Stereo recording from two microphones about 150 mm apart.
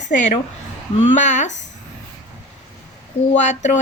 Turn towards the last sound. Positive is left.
turn(degrees=50)  # may be behind; listen again after turning